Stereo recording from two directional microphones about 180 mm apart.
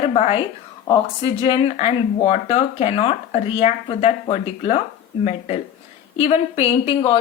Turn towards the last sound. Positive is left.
turn(degrees=30)  # may be behind; listen again after turning